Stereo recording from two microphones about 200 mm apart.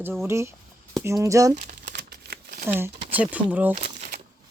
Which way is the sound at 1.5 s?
40° right (ahead or behind).